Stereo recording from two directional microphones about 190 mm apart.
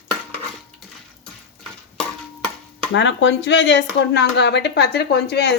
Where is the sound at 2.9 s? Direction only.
70° left (ahead or behind).